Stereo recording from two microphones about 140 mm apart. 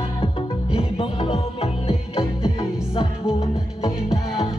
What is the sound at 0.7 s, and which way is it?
Music, 40° left (ahead or behind).